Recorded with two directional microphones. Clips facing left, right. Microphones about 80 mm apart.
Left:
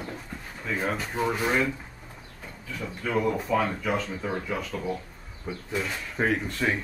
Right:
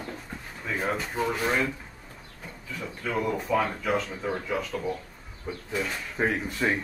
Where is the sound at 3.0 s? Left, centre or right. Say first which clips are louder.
Left 2 dB; centre.